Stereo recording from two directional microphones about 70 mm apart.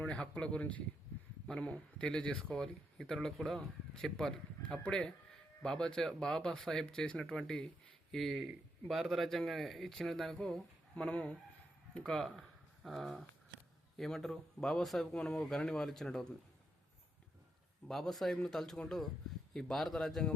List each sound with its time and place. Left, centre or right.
0.0 s a man's voice: centre
17.8 s a man's voice: centre